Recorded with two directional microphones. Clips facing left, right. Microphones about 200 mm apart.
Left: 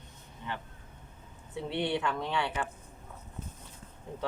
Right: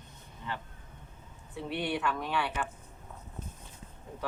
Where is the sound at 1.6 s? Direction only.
25° left (ahead or behind).